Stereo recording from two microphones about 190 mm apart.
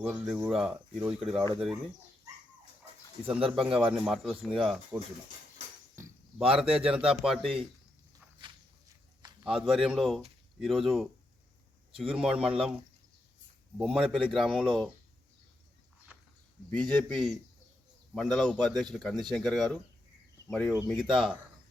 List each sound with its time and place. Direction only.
0.0 s a man's voice: 5° right (ahead or behind)
3.2 s a man's voice: 5° right (ahead or behind)
6.5 s a man's voice: 5° right (ahead or behind)
9.5 s a man's voice: 5° right (ahead or behind)
11.9 s a man's voice: 30° right (ahead or behind)
12.1 s a man's voice: 5° right (ahead or behind)
13.7 s a man's voice: 5° right (ahead or behind)
16.9 s a man's voice: 5° left (ahead or behind)